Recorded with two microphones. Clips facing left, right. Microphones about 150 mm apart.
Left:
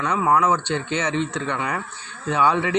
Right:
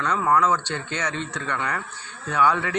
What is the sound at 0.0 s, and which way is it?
A man's voice, 15° left (ahead or behind).